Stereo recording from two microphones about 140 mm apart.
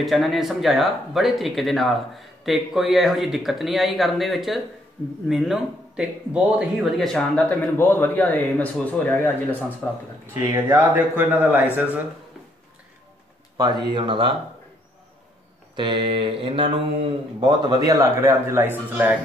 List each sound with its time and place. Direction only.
0.0 s speech: centre (ahead or behind)
10.7 s a man's voice: 10° right (ahead or behind)
13.6 s mantra: 30° right (ahead or behind)
15.7 s mantra: 35° right (ahead or behind)
17.4 s a man's voice: 30° right (ahead or behind); by 19.1 s 15° right (ahead or behind)